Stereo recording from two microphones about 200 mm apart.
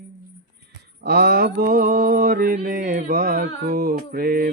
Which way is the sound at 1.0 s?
50° right (ahead or behind).